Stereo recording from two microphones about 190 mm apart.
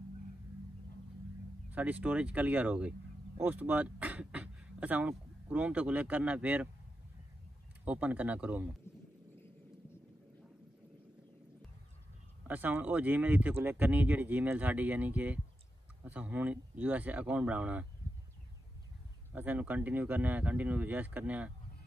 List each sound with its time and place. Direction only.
1.7 s speech: 10° right (ahead or behind)
7.8 s speech: 10° right (ahead or behind)
8.9 s a sound: 15° left (ahead or behind)
12.4 s speech: 10° right (ahead or behind)
19.3 s speech: 10° right (ahead or behind)